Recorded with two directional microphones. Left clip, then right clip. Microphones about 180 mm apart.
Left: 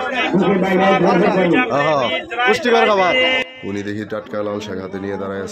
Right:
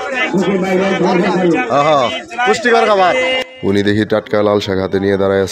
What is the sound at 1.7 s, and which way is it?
A man's voice, 15° right (ahead or behind).